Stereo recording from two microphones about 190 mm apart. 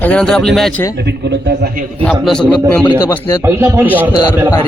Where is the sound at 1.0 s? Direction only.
60° right (ahead or behind).